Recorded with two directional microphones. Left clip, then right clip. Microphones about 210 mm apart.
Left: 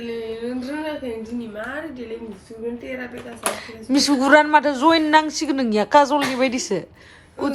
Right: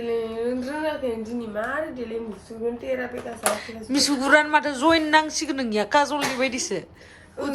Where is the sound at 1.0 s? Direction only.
15° right (ahead or behind).